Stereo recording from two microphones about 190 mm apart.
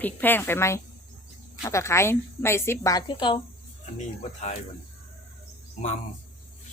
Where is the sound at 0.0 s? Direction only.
10° left (ahead or behind); by 3.3 s 25° left (ahead or behind).